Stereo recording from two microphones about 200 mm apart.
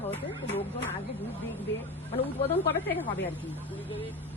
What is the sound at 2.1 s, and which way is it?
Speech, 30° left (ahead or behind).